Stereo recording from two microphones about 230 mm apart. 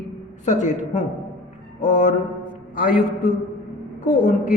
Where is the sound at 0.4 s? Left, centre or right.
Left.